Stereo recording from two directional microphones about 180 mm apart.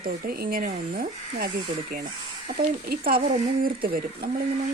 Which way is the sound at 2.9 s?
55° right (ahead or behind).